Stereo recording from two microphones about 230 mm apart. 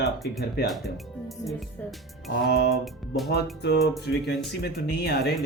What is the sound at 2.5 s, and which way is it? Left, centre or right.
Speech, left.